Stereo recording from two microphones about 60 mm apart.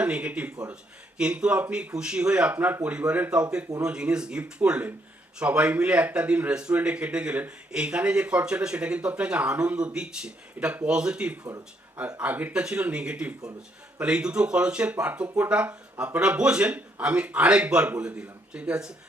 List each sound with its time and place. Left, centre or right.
0.0 s speech: centre
12.2 s speech: right
12.5 s speech: centre